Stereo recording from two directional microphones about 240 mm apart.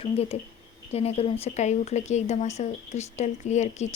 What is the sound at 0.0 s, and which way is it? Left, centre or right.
A woman's voice, left.